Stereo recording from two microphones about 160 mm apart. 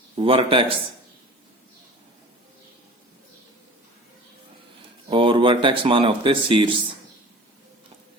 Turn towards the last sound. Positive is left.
turn(degrees=-30)  # may be behind; listen again after turning